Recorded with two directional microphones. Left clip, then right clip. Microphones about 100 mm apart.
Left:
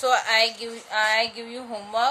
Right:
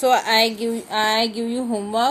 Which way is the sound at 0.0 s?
30° right (ahead or behind).